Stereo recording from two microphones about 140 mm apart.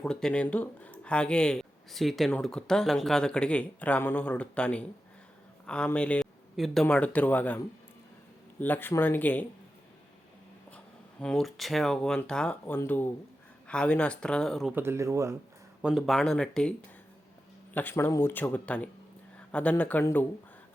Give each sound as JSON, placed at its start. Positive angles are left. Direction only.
{"t": 0.0, "sound": "speech", "side_deg": 5}
{"t": 11.2, "sound": "speech", "side_deg": 5}
{"t": 14.7, "sound": "speech", "side_deg": -15}
{"t": 15.8, "sound": "speech", "side_deg": -5}
{"t": 17.7, "sound": "speech", "side_deg": 15}